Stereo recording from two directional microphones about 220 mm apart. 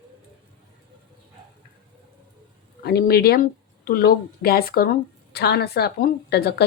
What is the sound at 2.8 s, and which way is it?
A woman's voice, 45° left (ahead or behind).